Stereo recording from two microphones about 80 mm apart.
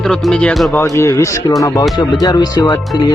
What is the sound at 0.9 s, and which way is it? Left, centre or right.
Speech, left.